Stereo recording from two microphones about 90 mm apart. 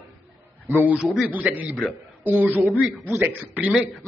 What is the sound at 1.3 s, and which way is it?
Speech, 20° right (ahead or behind).